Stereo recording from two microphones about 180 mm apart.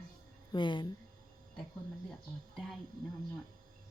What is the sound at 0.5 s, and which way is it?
Speech, 25° left (ahead or behind).